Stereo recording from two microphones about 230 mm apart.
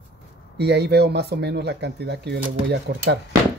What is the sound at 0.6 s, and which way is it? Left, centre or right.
Speech, right.